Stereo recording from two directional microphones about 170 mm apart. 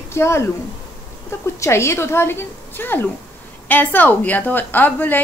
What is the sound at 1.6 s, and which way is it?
A woman's voice, 15° left (ahead or behind).